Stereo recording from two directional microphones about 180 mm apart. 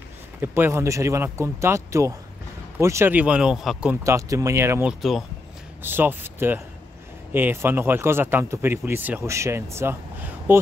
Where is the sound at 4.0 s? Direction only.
15° right (ahead or behind).